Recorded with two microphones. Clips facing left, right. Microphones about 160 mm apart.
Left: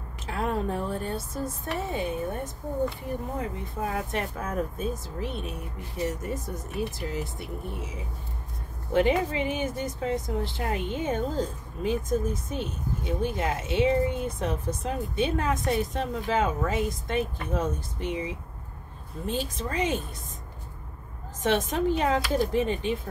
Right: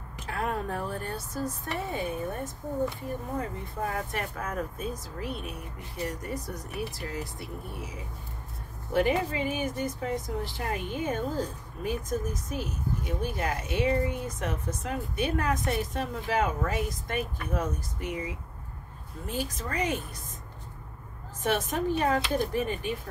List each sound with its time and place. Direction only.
0.3 s a woman's voice: 25° left (ahead or behind)
3.3 s a woman's voice: 20° left (ahead or behind)
8.9 s a woman's voice: 25° left (ahead or behind)
21.5 s a woman's voice: 20° left (ahead or behind)